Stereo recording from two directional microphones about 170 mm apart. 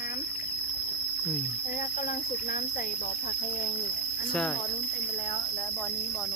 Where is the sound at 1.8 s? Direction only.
55° left (ahead or behind).